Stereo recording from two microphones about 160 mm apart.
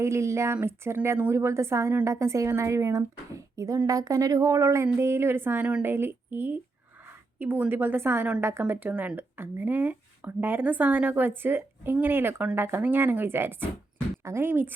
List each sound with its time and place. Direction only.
0.0 s a woman's voice: 20° right (ahead or behind)